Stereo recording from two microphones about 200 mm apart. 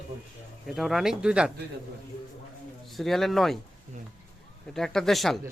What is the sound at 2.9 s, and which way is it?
Speech, centre (ahead or behind).